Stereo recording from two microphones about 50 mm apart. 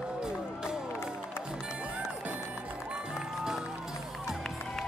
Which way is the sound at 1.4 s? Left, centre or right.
Centre.